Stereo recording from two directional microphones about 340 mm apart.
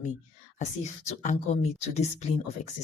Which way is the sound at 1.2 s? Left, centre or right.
Left.